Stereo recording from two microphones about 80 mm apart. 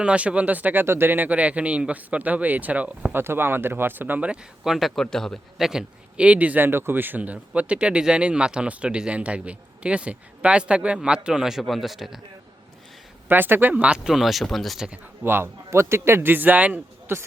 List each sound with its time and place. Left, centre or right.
0.0 s speech: centre
3.2 s speech: right
4.3 s a man's voice: centre
13.2 s a man's voice: right; by 14.8 s centre
15.2 s speech: right
17.1 s speech: right